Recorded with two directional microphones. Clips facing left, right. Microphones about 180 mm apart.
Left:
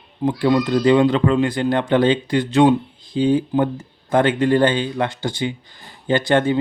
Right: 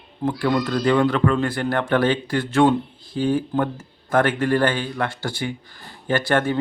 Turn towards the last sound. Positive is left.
turn(degrees=20)  # may be behind; listen again after turning